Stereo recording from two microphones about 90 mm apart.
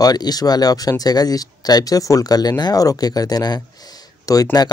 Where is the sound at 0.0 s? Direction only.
45° left (ahead or behind).